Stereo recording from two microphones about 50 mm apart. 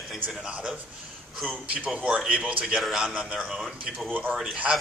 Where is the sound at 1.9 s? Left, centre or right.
Right.